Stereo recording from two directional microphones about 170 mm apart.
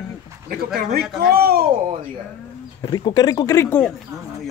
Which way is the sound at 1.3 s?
65° right (ahead or behind).